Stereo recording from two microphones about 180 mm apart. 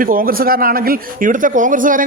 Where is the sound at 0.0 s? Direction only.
50° right (ahead or behind).